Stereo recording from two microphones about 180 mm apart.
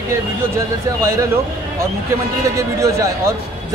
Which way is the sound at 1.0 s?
15° right (ahead or behind).